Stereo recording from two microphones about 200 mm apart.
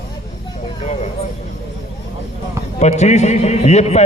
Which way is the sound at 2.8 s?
35° left (ahead or behind).